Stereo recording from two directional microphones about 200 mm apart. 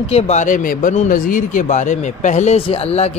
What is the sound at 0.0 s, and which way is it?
Speech, 35° left (ahead or behind).